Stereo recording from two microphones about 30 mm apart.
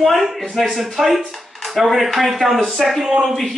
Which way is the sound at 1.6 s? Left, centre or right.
Centre.